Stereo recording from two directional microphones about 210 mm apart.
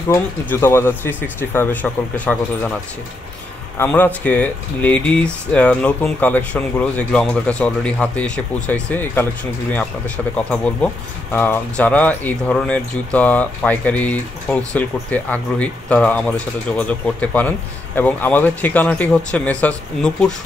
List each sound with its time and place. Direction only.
0.1 s speech: 10° left (ahead or behind)
3.7 s speech: 10° left (ahead or behind)